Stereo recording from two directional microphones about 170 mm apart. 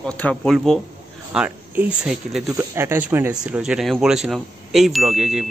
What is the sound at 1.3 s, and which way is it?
Speech, 5° right (ahead or behind).